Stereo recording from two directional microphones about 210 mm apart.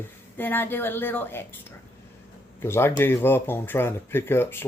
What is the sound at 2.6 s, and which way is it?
Speech, 10° left (ahead or behind).